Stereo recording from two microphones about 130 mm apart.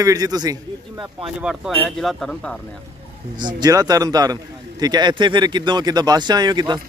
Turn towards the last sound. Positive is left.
turn(degrees=-35)  # may be behind; listen again after turning